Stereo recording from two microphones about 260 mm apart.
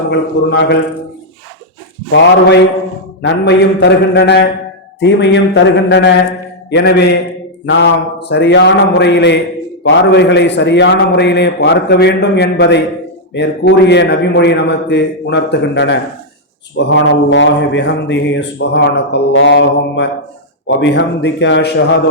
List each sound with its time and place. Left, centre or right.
0.1 s a man's voice: left
3.2 s a man's voice: left